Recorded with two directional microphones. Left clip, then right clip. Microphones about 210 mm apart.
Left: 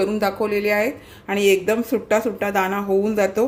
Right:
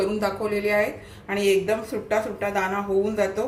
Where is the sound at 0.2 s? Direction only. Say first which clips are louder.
Left 4 dB; 45° left (ahead or behind).